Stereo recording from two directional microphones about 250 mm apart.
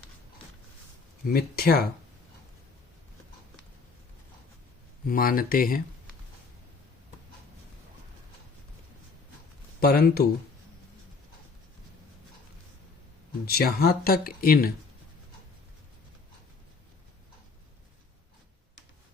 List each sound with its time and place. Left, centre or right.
1.3 s speech: left
5.0 s speech: left
9.8 s speech: left
13.4 s speech: left